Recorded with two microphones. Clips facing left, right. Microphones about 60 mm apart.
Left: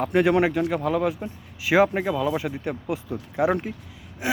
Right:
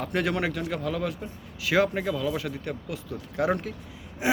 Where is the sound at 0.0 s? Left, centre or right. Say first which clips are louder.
Left 7 dB; centre.